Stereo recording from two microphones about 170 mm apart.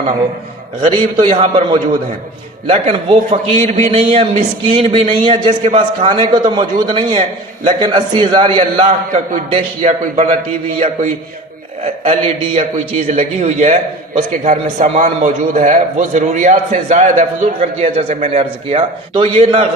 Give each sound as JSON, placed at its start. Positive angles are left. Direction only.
{"t": 0.8, "sound": "a man's voice", "side_deg": -30}
{"t": 2.6, "sound": "a man's voice", "side_deg": -35}
{"t": 8.8, "sound": "a man's voice", "side_deg": -40}